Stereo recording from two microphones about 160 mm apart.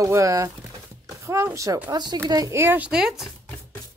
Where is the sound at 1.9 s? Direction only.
25° right (ahead or behind); by 3.3 s 5° right (ahead or behind).